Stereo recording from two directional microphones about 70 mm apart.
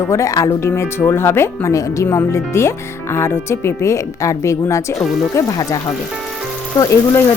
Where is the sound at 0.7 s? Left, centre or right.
Left.